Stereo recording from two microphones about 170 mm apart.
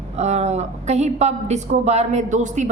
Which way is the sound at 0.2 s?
40° right (ahead or behind).